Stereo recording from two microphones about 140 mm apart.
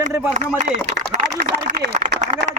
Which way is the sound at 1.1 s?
65° right (ahead or behind).